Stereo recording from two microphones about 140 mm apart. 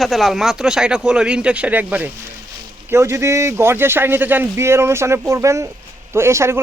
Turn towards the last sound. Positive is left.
turn(degrees=-20)  # may be behind; listen again after turning